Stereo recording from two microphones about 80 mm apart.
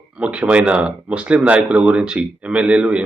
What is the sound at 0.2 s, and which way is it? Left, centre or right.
Speech, centre.